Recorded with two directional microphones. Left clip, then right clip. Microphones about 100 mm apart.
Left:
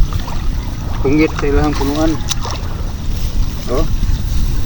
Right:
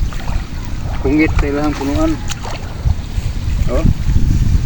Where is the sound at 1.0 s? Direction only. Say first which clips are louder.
Left 1 dB; 20° right (ahead or behind).